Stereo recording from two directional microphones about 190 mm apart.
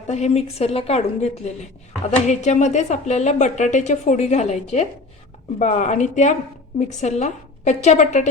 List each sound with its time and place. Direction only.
0.1 s a woman's voice: 35° left (ahead or behind)
5.5 s a woman's voice: 40° left (ahead or behind)